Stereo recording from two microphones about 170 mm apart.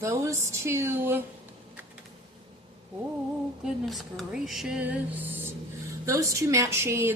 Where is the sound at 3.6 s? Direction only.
Centre (ahead or behind).